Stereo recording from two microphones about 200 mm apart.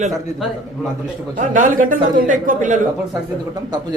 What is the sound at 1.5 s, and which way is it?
A man's voice, 40° right (ahead or behind).